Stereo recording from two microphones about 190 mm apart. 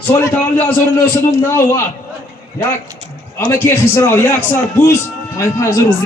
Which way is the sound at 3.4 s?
15° left (ahead or behind).